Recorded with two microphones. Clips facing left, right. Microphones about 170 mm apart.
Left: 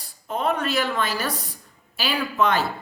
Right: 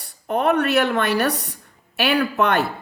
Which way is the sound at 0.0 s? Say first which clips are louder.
Right 5 dB; 65° right (ahead or behind).